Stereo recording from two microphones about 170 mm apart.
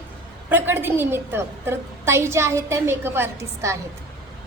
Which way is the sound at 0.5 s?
10° right (ahead or behind).